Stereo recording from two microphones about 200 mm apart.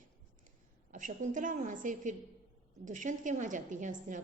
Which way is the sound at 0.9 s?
40° right (ahead or behind).